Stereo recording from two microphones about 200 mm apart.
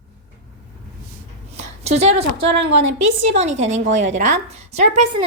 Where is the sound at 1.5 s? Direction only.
35° right (ahead or behind).